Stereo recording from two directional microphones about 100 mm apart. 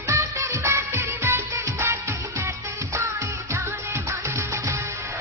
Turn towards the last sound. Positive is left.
turn(degrees=-30)  # may be behind; listen again after turning